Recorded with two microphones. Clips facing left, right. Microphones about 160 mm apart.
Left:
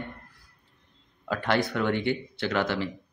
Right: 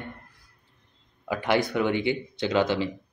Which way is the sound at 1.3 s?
15° right (ahead or behind).